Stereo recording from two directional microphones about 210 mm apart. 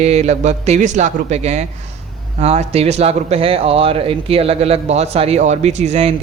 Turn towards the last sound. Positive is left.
turn(degrees=-30)  # may be behind; listen again after turning